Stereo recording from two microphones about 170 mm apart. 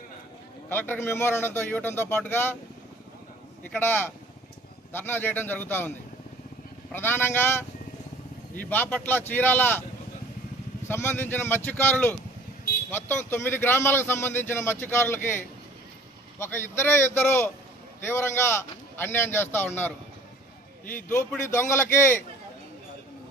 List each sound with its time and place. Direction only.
0.7 s a man's voice: 10° left (ahead or behind)
3.6 s a man's voice: 10° left (ahead or behind)
6.9 s a man's voice: 15° left (ahead or behind)
10.8 s a man's voice: 15° left (ahead or behind)
20.9 s a man's voice: 15° left (ahead or behind)